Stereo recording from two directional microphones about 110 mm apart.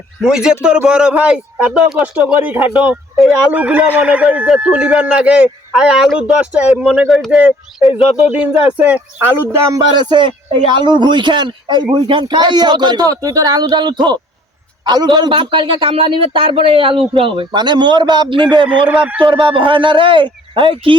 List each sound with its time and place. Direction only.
0.2 s speech: 5° right (ahead or behind)
8.9 s speech: 20° right (ahead or behind)
10.0 s a man's voice: 45° right (ahead or behind)
18.9 s speech: 10° right (ahead or behind)
19.2 s a man's voice: 55° right (ahead or behind)